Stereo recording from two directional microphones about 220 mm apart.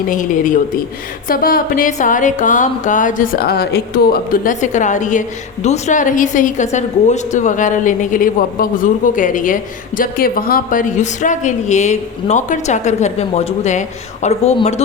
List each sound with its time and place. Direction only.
0.1 s a woman's voice: 35° left (ahead or behind)